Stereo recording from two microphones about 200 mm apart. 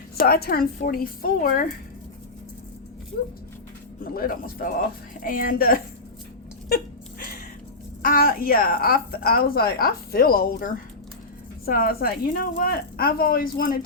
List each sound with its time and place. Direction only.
0.2 s a woman's voice: 50° left (ahead or behind)
3.1 s a woman's voice: 45° left (ahead or behind)
8.0 s a woman's voice: 45° left (ahead or behind)